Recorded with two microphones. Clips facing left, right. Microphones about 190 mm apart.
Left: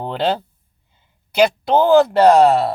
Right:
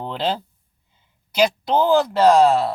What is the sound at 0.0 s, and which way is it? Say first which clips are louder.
Speech: left 4 dB; 60° left (ahead or behind).